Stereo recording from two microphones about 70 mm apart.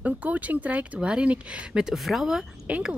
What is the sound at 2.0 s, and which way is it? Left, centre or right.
Speech, centre.